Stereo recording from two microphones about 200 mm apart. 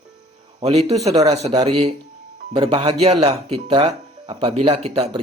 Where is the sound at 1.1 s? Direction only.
15° right (ahead or behind).